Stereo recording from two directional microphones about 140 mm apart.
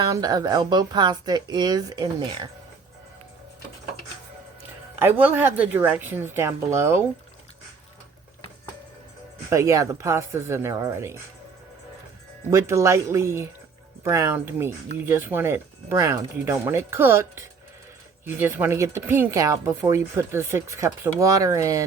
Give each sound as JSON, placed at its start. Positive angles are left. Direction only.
{"t": 0.0, "sound": "speech", "side_deg": -25}
{"t": 4.9, "sound": "speech", "side_deg": -15}
{"t": 9.5, "sound": "speech", "side_deg": -20}
{"t": 12.5, "sound": "speech", "side_deg": -20}